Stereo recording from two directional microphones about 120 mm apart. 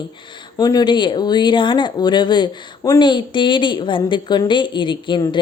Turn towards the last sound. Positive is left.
turn(degrees=40)  # may be behind; listen again after turning